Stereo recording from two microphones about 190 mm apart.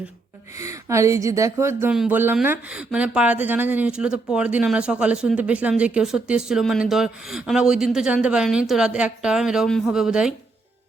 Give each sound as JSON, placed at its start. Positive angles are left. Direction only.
{"t": 0.5, "sound": "speech", "side_deg": -15}